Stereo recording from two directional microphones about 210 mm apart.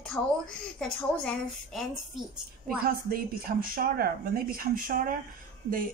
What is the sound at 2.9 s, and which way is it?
Speech, 45° right (ahead or behind).